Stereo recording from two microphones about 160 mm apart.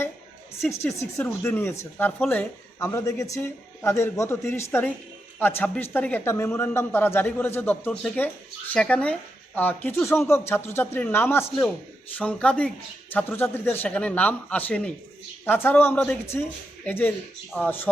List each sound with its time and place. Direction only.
0.6 s speech: 15° left (ahead or behind)